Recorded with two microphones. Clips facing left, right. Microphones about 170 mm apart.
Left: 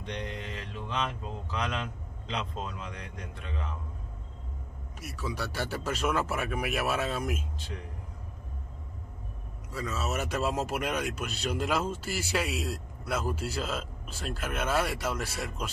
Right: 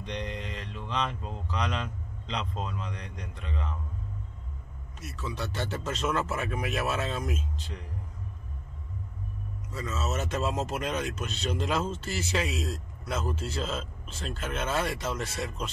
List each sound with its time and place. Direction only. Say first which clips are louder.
0.2 s speech: right 1 dB; centre (ahead or behind)
5.0 s speech: even; 10° left (ahead or behind)
9.7 s speech: even; 10° left (ahead or behind)